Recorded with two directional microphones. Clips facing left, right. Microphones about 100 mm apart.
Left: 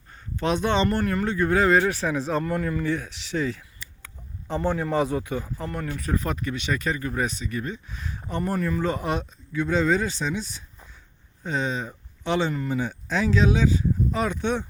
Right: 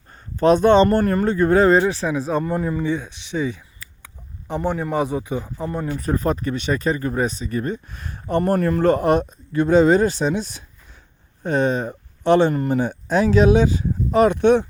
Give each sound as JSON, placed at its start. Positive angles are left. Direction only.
{"t": 0.3, "sound": "speech", "side_deg": -40}
{"t": 1.8, "sound": "speech", "side_deg": -20}
{"t": 6.0, "sound": "speech", "side_deg": -35}